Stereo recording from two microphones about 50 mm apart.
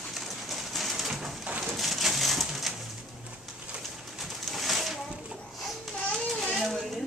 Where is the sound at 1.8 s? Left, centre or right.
Centre.